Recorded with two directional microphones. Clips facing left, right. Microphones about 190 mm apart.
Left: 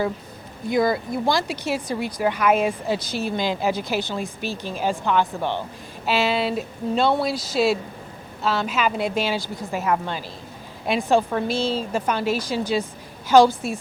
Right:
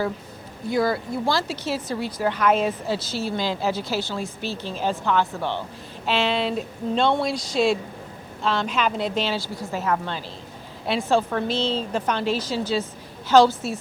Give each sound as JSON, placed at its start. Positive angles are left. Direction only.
{"t": 0.7, "sound": "a woman's voice", "side_deg": 15}